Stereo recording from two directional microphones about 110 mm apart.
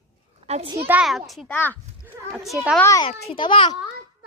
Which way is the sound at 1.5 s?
15° left (ahead or behind).